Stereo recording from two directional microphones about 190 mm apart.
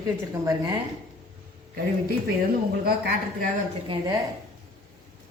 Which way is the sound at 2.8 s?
55° right (ahead or behind).